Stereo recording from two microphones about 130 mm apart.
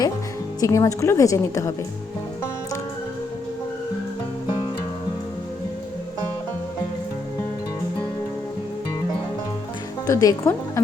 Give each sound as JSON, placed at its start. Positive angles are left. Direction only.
{"t": 0.6, "sound": "a woman's voice", "side_deg": 25}
{"t": 10.1, "sound": "a woman's voice", "side_deg": 25}